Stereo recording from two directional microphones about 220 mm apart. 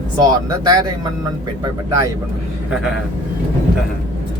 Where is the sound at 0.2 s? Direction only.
15° right (ahead or behind).